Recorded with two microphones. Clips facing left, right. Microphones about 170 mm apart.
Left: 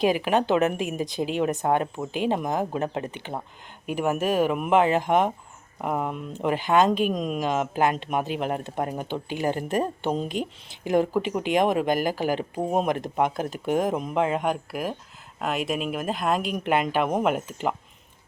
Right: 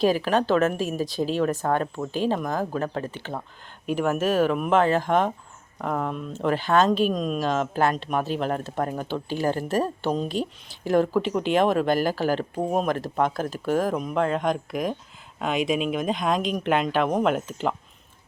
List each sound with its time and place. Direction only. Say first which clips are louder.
0.0 s speech: right 1 dB; 15° left (ahead or behind)